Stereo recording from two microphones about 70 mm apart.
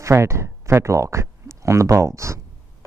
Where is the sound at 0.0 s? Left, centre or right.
Right.